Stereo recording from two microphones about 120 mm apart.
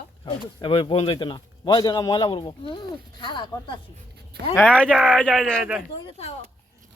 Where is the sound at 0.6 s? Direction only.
45° left (ahead or behind).